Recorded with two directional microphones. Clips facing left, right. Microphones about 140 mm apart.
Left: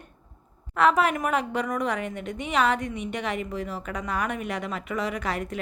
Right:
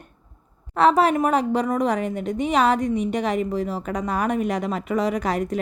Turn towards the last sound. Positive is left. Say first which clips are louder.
# right 6 dB
turn(degrees=-40)  # may be behind; listen again after turning